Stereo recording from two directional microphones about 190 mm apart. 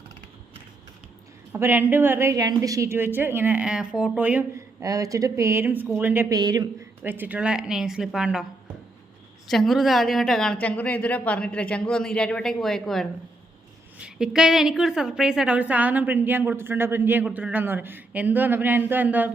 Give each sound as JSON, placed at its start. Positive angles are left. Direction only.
{"t": 1.5, "sound": "a woman's voice", "side_deg": -10}
{"t": 7.0, "sound": "a woman's voice", "side_deg": -10}